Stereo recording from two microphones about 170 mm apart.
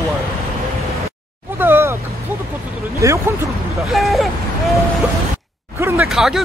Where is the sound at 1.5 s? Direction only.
15° right (ahead or behind).